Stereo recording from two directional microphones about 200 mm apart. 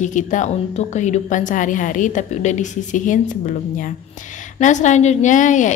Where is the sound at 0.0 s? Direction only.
40° left (ahead or behind).